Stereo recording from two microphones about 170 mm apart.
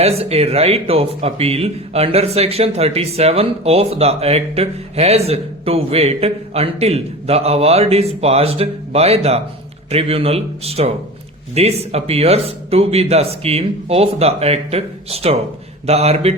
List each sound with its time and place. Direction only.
0.0 s speech: 35° right (ahead or behind)